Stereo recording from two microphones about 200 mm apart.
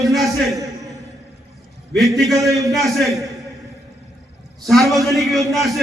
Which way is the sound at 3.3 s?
Centre (ahead or behind).